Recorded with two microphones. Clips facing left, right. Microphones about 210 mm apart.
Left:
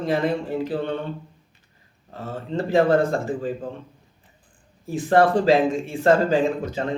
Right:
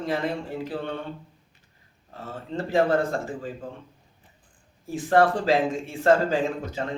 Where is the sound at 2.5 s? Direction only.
35° left (ahead or behind).